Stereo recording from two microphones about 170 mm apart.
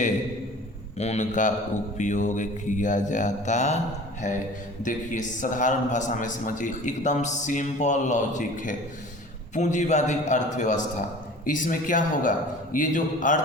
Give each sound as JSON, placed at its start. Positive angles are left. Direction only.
{"t": 0.9, "sound": "a man's voice", "side_deg": 40}